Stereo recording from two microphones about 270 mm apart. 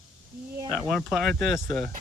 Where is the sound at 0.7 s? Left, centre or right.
Centre.